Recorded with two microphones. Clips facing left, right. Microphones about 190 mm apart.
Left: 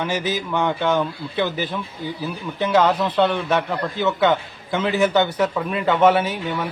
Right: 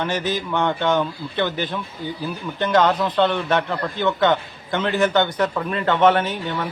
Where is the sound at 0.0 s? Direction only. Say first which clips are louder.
Even; 10° left (ahead or behind).